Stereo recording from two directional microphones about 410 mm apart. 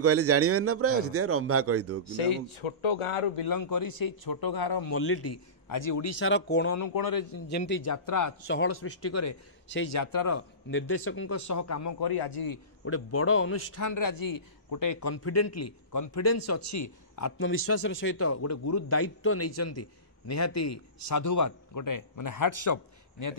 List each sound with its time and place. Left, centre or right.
0.0 s a man's voice: right
3.3 s a man's voice: left
4.8 s a man's voice: left
5.7 s a man's voice: left
6.7 s speech: left
7.4 s a man's voice: left
7.8 s speech: left
8.6 s a man's voice: left
10.7 s a man's voice: left
11.3 s speech: left
12.0 s a man's voice: left
12.8 s a man's voice: left
17.4 s a man's voice: left